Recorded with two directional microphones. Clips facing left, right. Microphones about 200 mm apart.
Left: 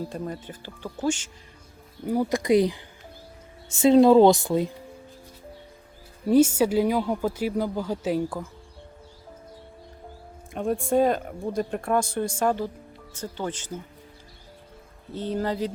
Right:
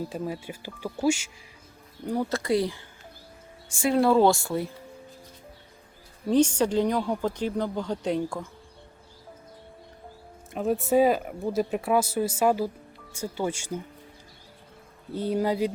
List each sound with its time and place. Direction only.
0.1 s speech: 10° right (ahead or behind)
2.0 s speech: 10° left (ahead or behind)
6.2 s speech: 5° left (ahead or behind)
10.5 s speech: 5° right (ahead or behind)
15.1 s speech: 10° right (ahead or behind)